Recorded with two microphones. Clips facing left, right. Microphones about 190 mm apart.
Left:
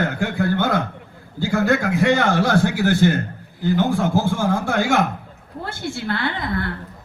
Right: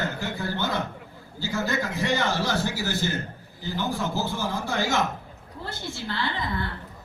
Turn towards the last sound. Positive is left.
turn(degrees=65)  # may be behind; listen again after turning